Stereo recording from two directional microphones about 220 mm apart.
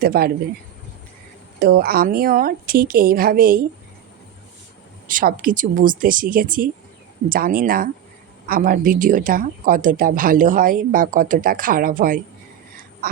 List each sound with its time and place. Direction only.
0.0 s speech: 45° right (ahead or behind)
1.5 s a woman's voice: 40° right (ahead or behind)
5.0 s a woman's voice: 40° right (ahead or behind)